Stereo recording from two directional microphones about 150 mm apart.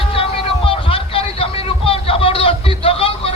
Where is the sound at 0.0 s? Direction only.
40° left (ahead or behind).